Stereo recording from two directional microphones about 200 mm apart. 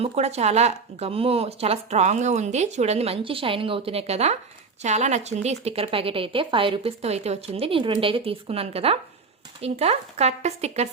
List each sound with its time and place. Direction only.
0.0 s a woman's voice: 30° right (ahead or behind)